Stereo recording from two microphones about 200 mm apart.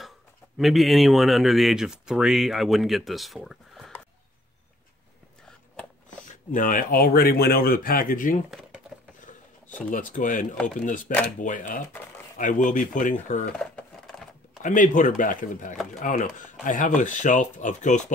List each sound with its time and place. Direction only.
0.6 s speech: centre (ahead or behind)
6.0 s speech: 40° left (ahead or behind)
8.5 s a sound: centre (ahead or behind)
9.8 s speech: 40° left (ahead or behind)
14.0 s a sound: centre (ahead or behind)
14.6 s speech: 40° left (ahead or behind)